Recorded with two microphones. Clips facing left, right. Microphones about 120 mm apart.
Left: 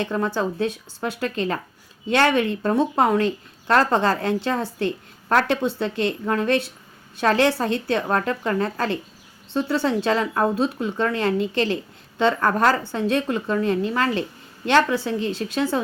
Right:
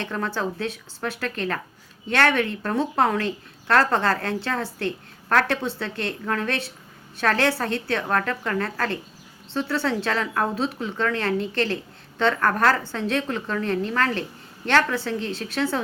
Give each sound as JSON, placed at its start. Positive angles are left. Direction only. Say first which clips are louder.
{"t": 0.0, "sound": "a woman's voice", "louder": "left 4 dB", "side_deg": 15}